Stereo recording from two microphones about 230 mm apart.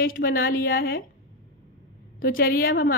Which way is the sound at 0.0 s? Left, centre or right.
Left.